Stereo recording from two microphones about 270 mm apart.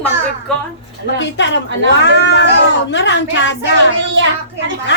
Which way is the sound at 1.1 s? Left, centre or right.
Left.